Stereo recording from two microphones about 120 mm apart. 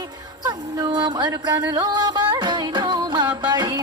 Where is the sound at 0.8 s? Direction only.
40° right (ahead or behind).